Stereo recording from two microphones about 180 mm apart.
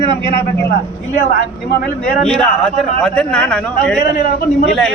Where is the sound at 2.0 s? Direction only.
5° left (ahead or behind).